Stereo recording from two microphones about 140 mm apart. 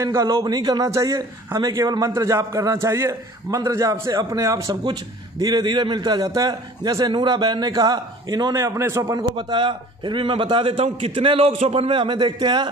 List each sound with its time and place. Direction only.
0.0 s a man's voice: 25° right (ahead or behind)